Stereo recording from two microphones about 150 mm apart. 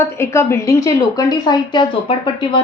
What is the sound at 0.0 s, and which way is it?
Speech, 20° left (ahead or behind).